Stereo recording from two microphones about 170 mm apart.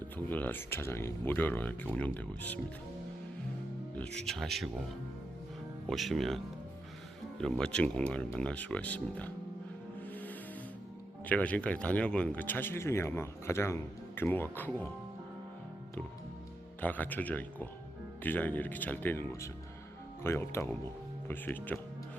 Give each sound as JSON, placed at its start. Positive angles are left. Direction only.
{"t": 0.3, "sound": "speech", "side_deg": 10}
{"t": 3.9, "sound": "speech", "side_deg": 5}
{"t": 5.9, "sound": "speech", "side_deg": 0}
{"t": 10.1, "sound": "music", "side_deg": 10}
{"t": 11.3, "sound": "speech", "side_deg": 10}
{"t": 16.8, "sound": "speech", "side_deg": 10}